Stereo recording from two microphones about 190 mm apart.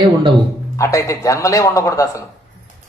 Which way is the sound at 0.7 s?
15° left (ahead or behind).